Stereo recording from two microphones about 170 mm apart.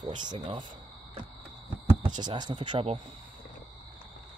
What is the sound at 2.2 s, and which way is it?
Speech, 25° right (ahead or behind).